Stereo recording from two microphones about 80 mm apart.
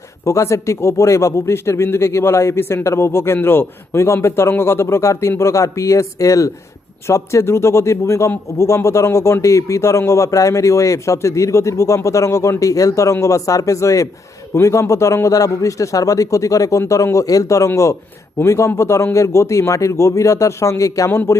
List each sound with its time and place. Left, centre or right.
0.3 s a man's voice: left